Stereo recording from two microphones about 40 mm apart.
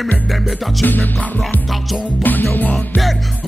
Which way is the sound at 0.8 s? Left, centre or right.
Left.